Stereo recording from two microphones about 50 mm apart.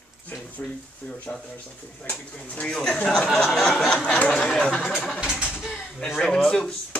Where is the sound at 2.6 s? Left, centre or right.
Centre.